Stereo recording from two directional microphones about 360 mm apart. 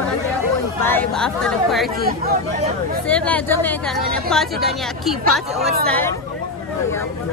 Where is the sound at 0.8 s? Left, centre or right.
Centre.